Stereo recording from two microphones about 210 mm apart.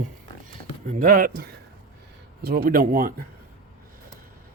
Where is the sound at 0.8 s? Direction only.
40° right (ahead or behind).